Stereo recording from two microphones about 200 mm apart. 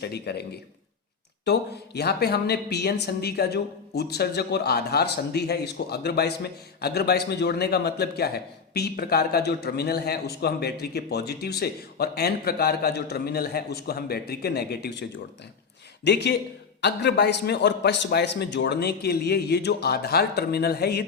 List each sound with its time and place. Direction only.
0.0 s a man's voice: 55° left (ahead or behind)
1.5 s a woman's voice: 55° left (ahead or behind)
16.0 s a man's voice: 55° left (ahead or behind)